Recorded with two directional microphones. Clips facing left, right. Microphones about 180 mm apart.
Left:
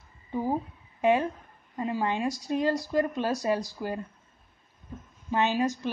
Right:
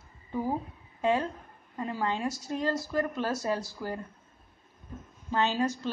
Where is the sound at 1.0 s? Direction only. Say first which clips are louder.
Left 3 dB; 15° left (ahead or behind).